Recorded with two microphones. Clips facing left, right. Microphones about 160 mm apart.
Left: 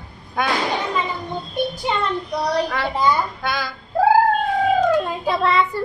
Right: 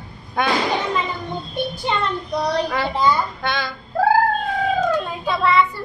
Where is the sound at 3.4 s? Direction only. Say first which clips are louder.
Right 1 dB; 5° left (ahead or behind).